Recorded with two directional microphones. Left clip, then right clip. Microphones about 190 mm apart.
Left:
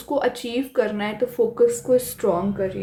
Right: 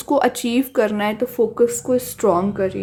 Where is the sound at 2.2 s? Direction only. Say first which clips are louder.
Right 4 dB; 40° right (ahead or behind).